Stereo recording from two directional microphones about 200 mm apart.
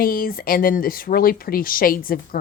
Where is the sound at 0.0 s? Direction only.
45° left (ahead or behind).